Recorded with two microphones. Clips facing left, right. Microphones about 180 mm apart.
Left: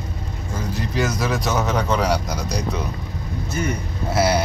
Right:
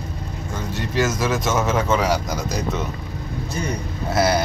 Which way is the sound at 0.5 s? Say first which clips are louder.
Right 1 dB; centre (ahead or behind).